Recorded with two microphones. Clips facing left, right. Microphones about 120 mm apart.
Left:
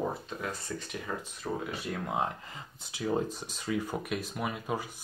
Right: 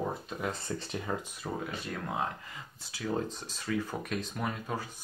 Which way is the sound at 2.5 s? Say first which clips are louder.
Left 1 dB; 20° left (ahead or behind).